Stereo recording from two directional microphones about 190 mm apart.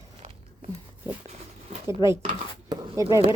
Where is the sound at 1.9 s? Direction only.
15° right (ahead or behind).